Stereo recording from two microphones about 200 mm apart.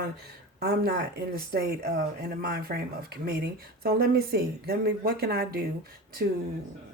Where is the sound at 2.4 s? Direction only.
50° right (ahead or behind).